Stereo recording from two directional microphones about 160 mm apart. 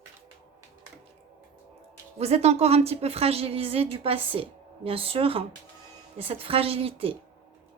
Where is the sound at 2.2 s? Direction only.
40° right (ahead or behind).